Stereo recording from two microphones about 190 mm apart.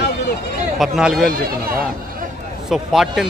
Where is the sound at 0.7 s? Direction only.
Centre (ahead or behind).